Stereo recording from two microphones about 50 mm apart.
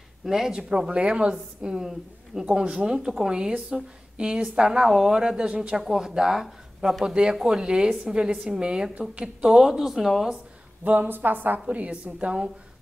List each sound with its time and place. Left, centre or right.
0.2 s speech: centre
2.4 s speech: centre
5.8 s a woman's voice: centre
10.8 s a woman's voice: right
11.6 s a woman's voice: right